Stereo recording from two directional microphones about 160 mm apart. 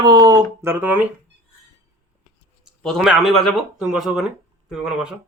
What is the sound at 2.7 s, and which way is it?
Speech, centre (ahead or behind).